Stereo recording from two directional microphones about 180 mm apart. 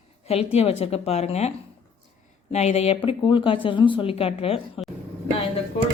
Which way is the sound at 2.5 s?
35° left (ahead or behind).